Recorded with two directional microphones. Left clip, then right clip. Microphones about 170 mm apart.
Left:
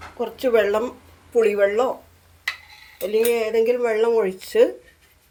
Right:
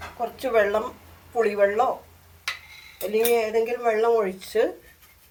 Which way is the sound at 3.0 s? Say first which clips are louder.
Left 2 dB; 80° left.